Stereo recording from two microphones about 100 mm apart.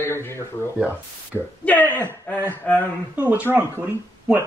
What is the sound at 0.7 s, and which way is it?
Speech, 20° right (ahead or behind).